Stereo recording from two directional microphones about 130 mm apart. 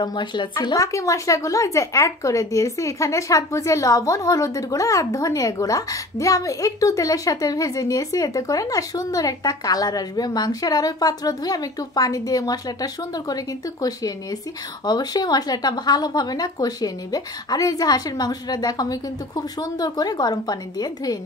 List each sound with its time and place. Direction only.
0.0 s a woman's voice: 35° left (ahead or behind)